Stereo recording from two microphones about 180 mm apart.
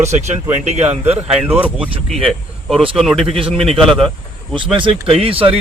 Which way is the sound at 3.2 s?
30° right (ahead or behind).